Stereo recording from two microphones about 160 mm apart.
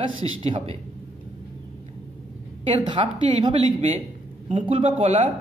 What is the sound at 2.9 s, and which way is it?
A woman's voice, 30° right (ahead or behind).